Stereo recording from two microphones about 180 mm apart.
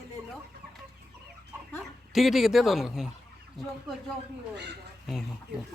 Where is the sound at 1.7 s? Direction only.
Centre (ahead or behind).